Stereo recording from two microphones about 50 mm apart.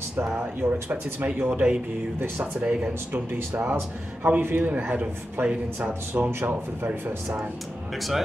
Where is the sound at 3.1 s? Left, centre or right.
Right.